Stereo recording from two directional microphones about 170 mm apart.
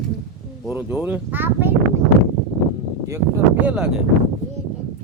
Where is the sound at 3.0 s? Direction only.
10° right (ahead or behind).